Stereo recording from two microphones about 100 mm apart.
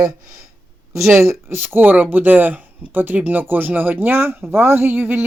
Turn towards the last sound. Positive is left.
turn(degrees=-20)  # may be behind; listen again after turning